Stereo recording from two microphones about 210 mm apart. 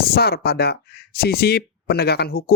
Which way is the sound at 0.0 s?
45° left (ahead or behind).